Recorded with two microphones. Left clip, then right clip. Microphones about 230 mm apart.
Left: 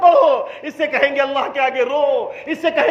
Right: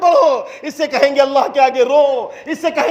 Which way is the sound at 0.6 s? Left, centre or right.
Right.